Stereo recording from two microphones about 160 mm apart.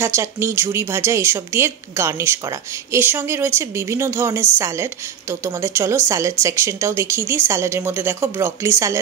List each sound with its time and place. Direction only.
0.0 s a woman's voice: 15° right (ahead or behind)